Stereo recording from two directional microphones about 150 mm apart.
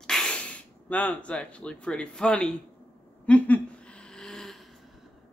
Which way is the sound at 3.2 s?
10° left (ahead or behind).